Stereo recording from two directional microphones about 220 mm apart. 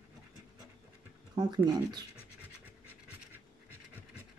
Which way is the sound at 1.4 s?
20° right (ahead or behind).